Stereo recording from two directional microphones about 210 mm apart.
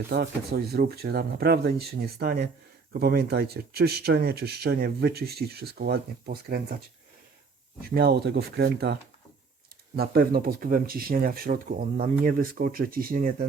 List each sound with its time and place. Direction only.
0.1 s speech: 50° right (ahead or behind)
7.8 s speech: 45° right (ahead or behind)